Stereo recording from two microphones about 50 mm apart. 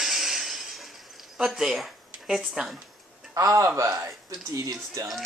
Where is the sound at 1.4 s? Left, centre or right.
Centre.